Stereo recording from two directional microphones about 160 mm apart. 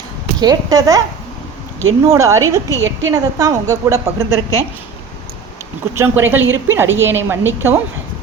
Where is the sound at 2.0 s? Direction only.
20° right (ahead or behind).